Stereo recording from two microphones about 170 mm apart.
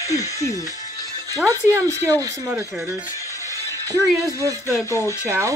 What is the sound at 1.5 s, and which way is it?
Speech, 15° right (ahead or behind).